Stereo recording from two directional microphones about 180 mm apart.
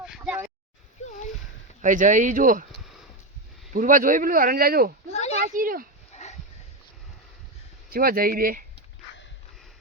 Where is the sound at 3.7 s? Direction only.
50° right (ahead or behind).